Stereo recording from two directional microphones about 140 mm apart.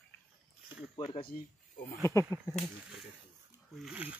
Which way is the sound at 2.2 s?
25° left (ahead or behind).